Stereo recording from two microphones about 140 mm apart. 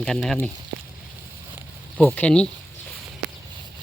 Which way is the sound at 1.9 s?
10° left (ahead or behind).